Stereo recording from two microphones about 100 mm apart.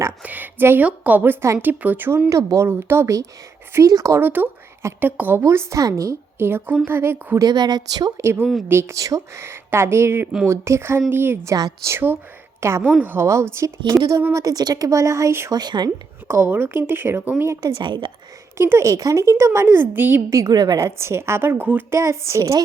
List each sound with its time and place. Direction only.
0.2 s a sound: 15° right (ahead or behind)
0.9 s a woman's voice: 15° right (ahead or behind)
5.4 s a woman's voice: 30° right (ahead or behind)
7.3 s a woman's voice: 40° right (ahead or behind)
8.2 s a woman's voice: 25° right (ahead or behind)
14.3 s speech: 40° right (ahead or behind)
15.5 s a woman's voice: 45° right (ahead or behind)
16.3 s a woman's voice: 20° right (ahead or behind)
17.5 s speech: 35° right (ahead or behind)
17.8 s a woman's voice: 50° right (ahead or behind)
18.5 s a woman's voice: 25° right (ahead or behind)
20.3 s a woman's voice: 35° right (ahead or behind)